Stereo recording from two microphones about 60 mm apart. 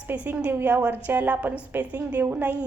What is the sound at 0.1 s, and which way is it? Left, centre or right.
A woman's voice, right.